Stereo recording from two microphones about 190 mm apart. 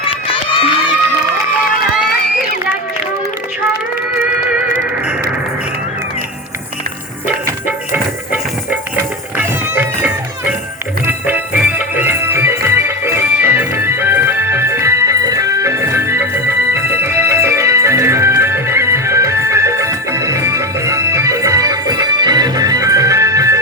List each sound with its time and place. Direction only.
0.0 s run: 30° left (ahead or behind)
7.9 s music: 10° right (ahead or behind)